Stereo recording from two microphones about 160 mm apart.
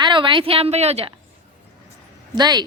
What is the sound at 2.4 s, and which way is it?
Speech, 25° right (ahead or behind).